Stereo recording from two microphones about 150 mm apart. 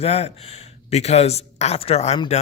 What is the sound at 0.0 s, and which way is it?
Speech, 45° left (ahead or behind).